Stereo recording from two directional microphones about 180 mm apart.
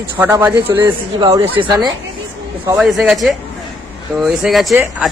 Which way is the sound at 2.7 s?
Centre (ahead or behind).